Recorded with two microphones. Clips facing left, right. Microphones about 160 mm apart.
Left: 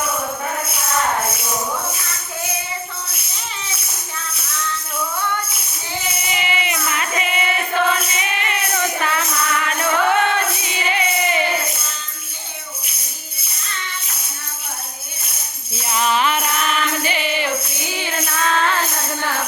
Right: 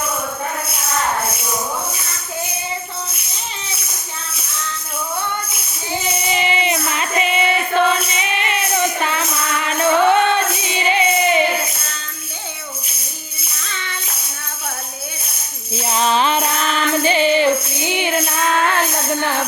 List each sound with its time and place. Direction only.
6.3 s music: 30° right (ahead or behind)
15.9 s music: 30° right (ahead or behind)